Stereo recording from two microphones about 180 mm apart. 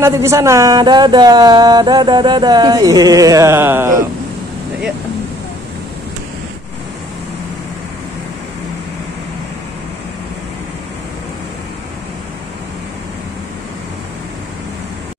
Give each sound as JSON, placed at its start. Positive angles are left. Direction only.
{"t": 0.0, "sound": "speech", "side_deg": -15}